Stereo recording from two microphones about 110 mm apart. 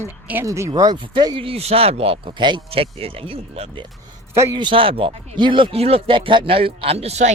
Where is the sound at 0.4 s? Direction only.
25° right (ahead or behind).